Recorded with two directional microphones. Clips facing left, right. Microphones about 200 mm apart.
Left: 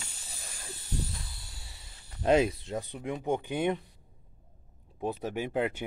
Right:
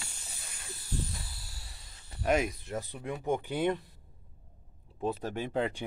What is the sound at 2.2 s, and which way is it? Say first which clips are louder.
Speech: left 4 dB; 30° left (ahead or behind).